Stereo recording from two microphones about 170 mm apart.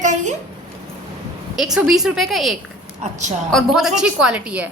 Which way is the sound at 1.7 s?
5° right (ahead or behind).